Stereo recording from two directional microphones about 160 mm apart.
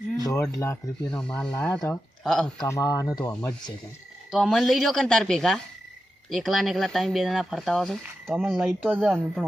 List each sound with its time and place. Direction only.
0.6 s speech: 15° left (ahead or behind)
2.6 s speech: 20° left (ahead or behind)
4.3 s speech: centre (ahead or behind)